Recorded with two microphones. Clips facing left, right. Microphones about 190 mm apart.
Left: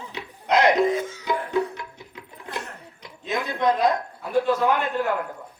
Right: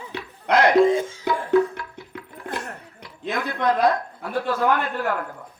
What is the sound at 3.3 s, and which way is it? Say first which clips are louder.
Speech: even; 20° left (ahead or behind).